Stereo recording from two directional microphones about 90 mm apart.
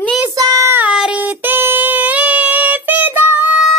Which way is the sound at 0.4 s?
45° right (ahead or behind).